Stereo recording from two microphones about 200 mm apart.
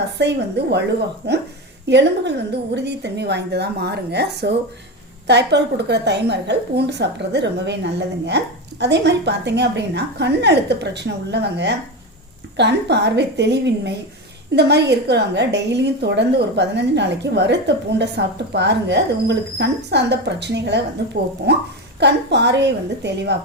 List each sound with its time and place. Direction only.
0.2 s a woman's voice: 60° right (ahead or behind)